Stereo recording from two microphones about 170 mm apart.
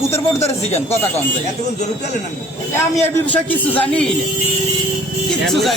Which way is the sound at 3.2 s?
10° left (ahead or behind).